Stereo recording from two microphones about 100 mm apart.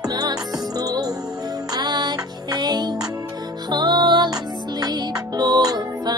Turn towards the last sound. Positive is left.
turn(degrees=-40)  # may be behind; listen again after turning